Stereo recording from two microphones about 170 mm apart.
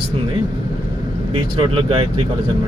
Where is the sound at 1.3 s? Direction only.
35° right (ahead or behind).